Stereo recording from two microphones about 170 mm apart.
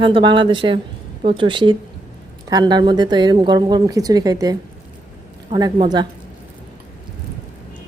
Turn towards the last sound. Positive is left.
turn(degrees=-25)  # may be behind; listen again after turning